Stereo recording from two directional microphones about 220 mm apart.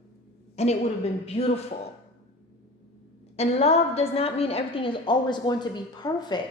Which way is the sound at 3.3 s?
30° left (ahead or behind).